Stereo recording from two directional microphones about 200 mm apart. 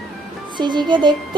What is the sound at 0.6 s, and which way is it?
Speech, 20° right (ahead or behind).